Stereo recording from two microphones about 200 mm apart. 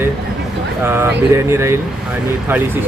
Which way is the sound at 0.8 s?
10° right (ahead or behind).